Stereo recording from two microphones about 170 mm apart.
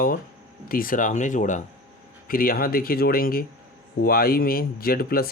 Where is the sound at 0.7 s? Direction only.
55° left (ahead or behind).